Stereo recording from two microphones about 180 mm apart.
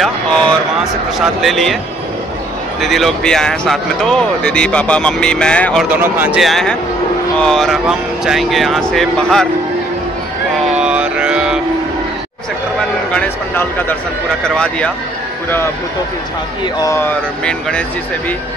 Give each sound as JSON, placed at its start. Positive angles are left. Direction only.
{"t": 0.0, "sound": "speech", "side_deg": 5}
{"t": 2.8, "sound": "speech", "side_deg": 0}
{"t": 5.9, "sound": "speech", "side_deg": -10}
{"t": 10.8, "sound": "music", "side_deg": -5}
{"t": 13.1, "sound": "speech", "side_deg": 10}
{"t": 16.7, "sound": "speech", "side_deg": 15}
{"t": 17.5, "sound": "speech", "side_deg": 5}